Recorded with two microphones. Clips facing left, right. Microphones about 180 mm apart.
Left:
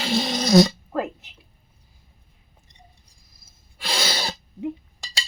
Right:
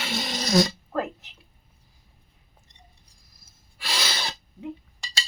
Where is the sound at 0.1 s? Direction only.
25° left (ahead or behind).